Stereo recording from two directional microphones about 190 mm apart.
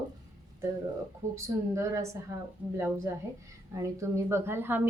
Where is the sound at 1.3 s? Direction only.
15° right (ahead or behind).